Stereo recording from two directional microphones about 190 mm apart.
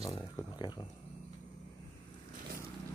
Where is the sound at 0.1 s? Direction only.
20° left (ahead or behind).